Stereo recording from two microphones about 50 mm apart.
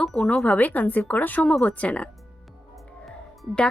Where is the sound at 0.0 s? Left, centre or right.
Left.